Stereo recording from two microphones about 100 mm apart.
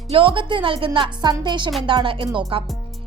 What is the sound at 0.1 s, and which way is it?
A woman's voice, 65° right (ahead or behind).